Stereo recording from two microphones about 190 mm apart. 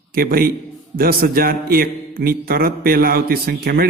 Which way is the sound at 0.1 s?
50° right (ahead or behind).